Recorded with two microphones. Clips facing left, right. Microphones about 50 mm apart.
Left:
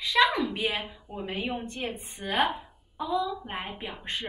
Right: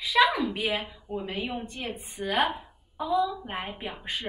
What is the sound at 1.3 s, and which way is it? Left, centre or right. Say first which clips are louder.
Speech: left 5 dB; centre.